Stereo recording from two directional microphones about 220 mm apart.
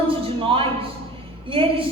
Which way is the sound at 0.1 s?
25° right (ahead or behind).